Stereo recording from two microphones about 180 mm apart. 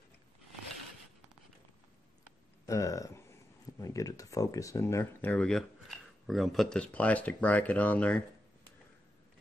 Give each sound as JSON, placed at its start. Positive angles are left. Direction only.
{"t": 2.6, "sound": "speech", "side_deg": 15}